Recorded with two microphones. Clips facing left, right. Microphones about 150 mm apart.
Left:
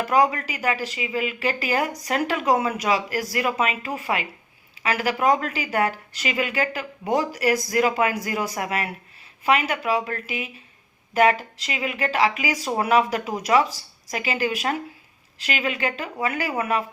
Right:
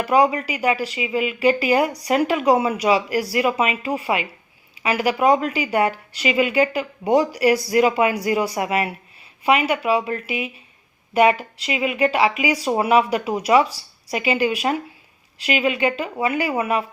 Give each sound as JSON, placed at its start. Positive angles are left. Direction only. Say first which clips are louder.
{"t": 0.0, "sound": "speech", "louder": "right 3 dB", "side_deg": -10}